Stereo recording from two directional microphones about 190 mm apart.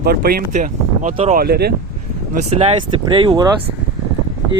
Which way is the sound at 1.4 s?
55° right (ahead or behind).